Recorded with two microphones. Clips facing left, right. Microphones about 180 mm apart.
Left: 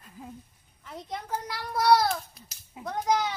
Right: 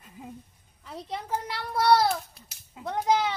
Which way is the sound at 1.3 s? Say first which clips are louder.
Right 2 dB; 25° right (ahead or behind).